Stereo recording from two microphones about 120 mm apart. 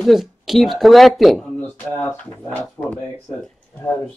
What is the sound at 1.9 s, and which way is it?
Speech, 15° left (ahead or behind).